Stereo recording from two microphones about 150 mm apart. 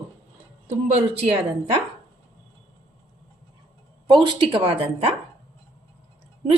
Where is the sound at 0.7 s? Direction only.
45° right (ahead or behind).